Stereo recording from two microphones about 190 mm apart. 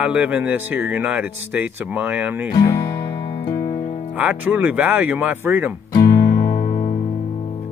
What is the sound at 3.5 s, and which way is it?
Music, 20° left (ahead or behind).